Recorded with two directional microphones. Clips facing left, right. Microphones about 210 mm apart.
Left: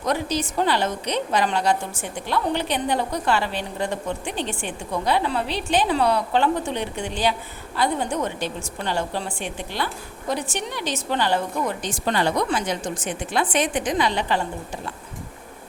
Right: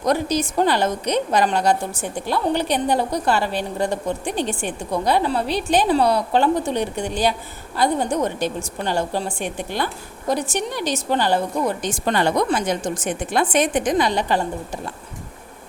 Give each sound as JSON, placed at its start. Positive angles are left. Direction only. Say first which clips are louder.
{"t": 0.0, "sound": "a woman's voice", "louder": "right 4 dB", "side_deg": -40}